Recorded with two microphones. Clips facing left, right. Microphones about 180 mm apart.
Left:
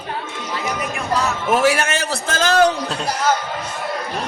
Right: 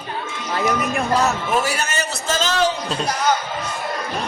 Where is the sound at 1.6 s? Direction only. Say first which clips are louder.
Left 6 dB; 60° left (ahead or behind).